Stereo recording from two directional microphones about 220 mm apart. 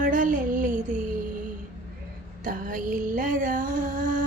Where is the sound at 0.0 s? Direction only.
35° right (ahead or behind).